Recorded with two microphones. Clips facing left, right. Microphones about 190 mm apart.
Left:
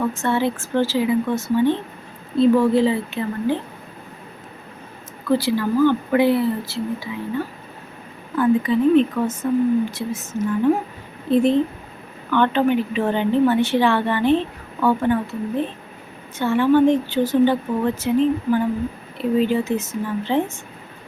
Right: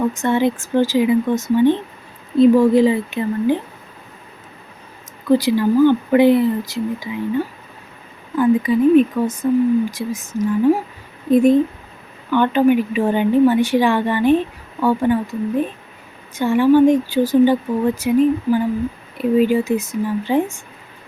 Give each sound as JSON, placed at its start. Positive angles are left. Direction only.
{"t": 0.1, "sound": "a woman's voice", "side_deg": -15}
{"t": 5.3, "sound": "a woman's voice", "side_deg": -15}